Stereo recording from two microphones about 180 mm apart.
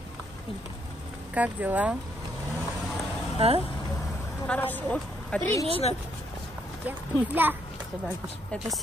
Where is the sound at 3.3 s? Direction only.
35° right (ahead or behind).